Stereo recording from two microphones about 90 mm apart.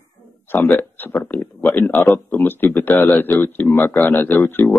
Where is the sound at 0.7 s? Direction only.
20° left (ahead or behind).